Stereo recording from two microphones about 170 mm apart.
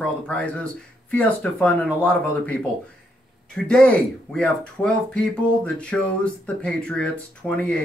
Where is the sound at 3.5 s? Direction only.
5° left (ahead or behind).